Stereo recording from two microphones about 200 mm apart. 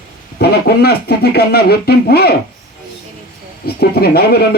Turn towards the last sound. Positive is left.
turn(degrees=50)  # may be behind; listen again after turning